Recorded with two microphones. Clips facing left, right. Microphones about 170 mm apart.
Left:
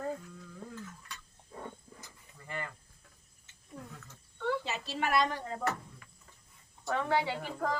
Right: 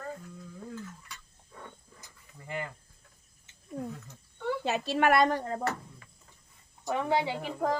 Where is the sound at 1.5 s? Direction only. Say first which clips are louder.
Left 4 dB; 30° left (ahead or behind).